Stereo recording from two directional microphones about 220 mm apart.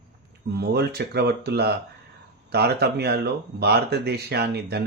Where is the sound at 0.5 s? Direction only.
45° right (ahead or behind).